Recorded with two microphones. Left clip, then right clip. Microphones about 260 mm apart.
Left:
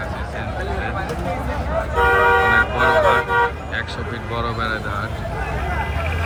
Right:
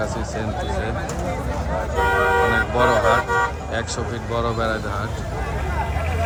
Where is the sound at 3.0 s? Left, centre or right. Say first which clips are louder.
Left 2 dB; left.